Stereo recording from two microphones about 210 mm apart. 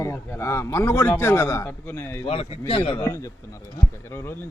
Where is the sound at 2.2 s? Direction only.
30° left (ahead or behind).